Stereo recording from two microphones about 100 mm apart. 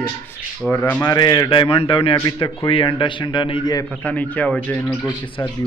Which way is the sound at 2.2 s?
40° left (ahead or behind).